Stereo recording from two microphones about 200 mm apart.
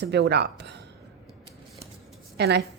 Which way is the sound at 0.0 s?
55° right (ahead or behind).